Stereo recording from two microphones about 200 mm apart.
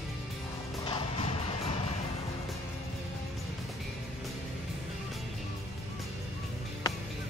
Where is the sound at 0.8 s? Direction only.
25° left (ahead or behind).